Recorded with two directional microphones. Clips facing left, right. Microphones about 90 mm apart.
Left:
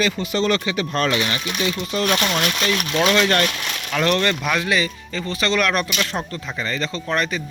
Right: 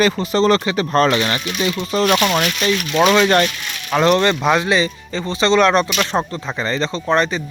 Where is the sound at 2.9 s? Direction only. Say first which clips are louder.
Right 5 dB; 20° right (ahead or behind).